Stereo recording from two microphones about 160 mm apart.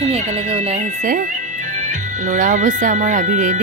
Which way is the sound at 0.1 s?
40° right (ahead or behind).